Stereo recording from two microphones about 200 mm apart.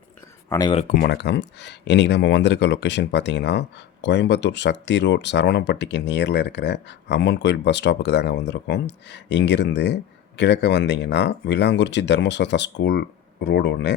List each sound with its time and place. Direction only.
0.7 s speech: 35° left (ahead or behind); by 13.9 s 60° left (ahead or behind)